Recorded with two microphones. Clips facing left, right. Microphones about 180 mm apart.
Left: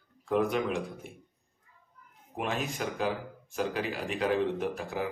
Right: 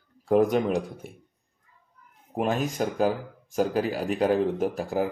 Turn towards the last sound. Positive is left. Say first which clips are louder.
# right 6 dB
turn(degrees=-40)  # may be behind; listen again after turning